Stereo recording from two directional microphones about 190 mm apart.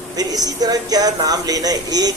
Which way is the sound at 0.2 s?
20° right (ahead or behind).